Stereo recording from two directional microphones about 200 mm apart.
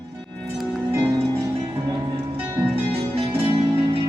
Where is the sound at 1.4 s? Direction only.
20° right (ahead or behind).